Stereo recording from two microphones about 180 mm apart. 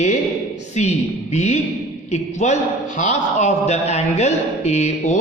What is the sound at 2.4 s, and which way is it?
A man's voice, 40° left (ahead or behind).